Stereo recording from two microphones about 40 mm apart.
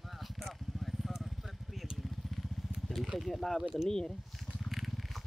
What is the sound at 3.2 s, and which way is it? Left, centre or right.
Speech, centre.